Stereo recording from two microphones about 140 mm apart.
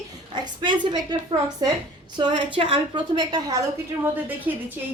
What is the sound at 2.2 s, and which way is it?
A woman's voice, 35° right (ahead or behind).